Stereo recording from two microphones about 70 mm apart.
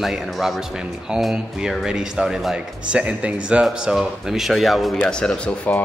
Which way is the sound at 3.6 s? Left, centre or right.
Centre.